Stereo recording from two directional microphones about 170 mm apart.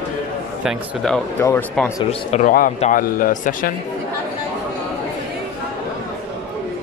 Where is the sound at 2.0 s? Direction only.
40° left (ahead or behind).